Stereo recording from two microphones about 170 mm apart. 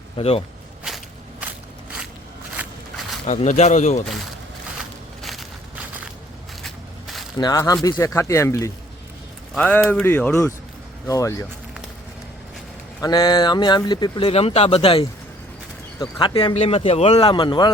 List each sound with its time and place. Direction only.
0.2 s a man's voice: 35° left (ahead or behind)
0.9 s walk: centre (ahead or behind)
3.2 s speech: 45° left (ahead or behind)
5.2 s walk: centre (ahead or behind)
6.6 s crushing: centre (ahead or behind)
7.3 s speech: 20° left (ahead or behind)
13.0 s a man's voice: 25° left (ahead or behind)